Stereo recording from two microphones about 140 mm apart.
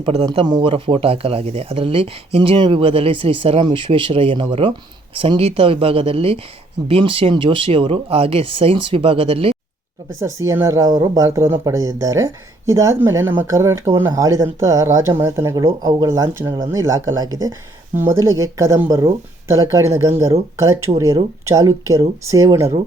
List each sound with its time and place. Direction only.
0.0 s speech: 40° right (ahead or behind)
10.2 s speech: 20° right (ahead or behind)